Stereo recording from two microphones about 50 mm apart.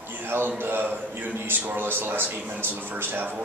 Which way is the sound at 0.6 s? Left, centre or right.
Right.